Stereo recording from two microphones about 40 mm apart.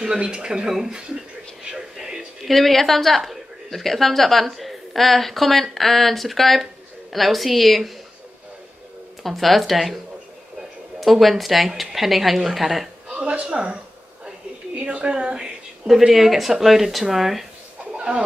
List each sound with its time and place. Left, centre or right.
0.0 s speech: centre
0.3 s speech: right
1.6 s television: centre
2.4 s a woman's voice: centre
9.2 s a woman's voice: centre
11.0 s a woman's voice: centre
13.1 s a woman's voice: right
14.8 s a woman's voice: right
15.9 s speech: centre
17.9 s chicken: right